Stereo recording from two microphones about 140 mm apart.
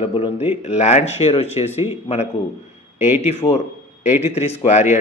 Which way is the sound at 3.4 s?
30° left (ahead or behind).